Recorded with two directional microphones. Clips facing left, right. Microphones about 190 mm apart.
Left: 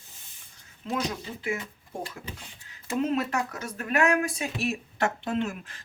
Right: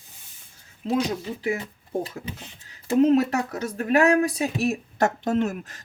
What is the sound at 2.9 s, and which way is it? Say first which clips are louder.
Speech: right 9 dB; 40° right (ahead or behind).